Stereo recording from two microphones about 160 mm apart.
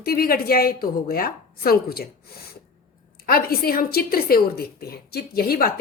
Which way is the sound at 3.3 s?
70° left (ahead or behind).